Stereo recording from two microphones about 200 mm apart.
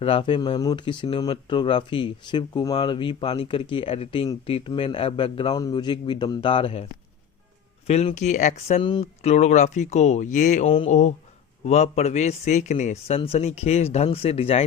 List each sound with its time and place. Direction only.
0.0 s speech: 25° left (ahead or behind)
7.9 s a man's voice: 35° left (ahead or behind)
9.3 s a man's voice: 35° left (ahead or behind)